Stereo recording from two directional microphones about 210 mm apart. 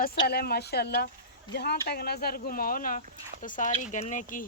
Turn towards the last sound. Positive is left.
turn(degrees=35)  # may be behind; listen again after turning